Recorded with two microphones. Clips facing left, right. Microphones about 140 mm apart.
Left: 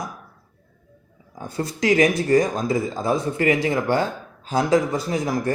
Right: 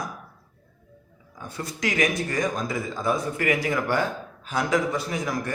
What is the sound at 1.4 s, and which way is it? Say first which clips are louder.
Speech: left 7 dB; 35° left (ahead or behind).